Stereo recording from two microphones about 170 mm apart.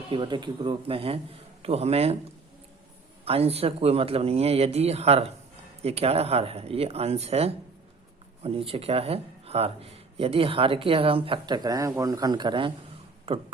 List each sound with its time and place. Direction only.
0.1 s speech: 25° right (ahead or behind)
3.2 s speech: 35° right (ahead or behind)